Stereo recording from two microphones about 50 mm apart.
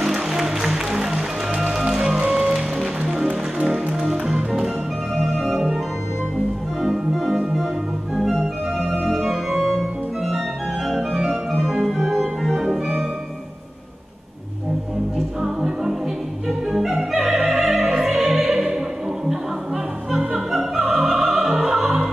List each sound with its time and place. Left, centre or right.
0.0 s music: centre
2.2 s music: right
5.2 s organ: centre
6.8 s organ: centre
8.3 s organ: centre
9.1 s organ: centre
11.0 s organ: centre
15.1 s music: centre
20.1 s opera: centre